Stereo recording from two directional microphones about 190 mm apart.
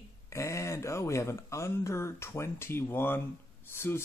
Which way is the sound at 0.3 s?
15° left (ahead or behind).